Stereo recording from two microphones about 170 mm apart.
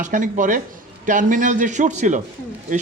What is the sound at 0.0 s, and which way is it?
Speech, 50° right (ahead or behind).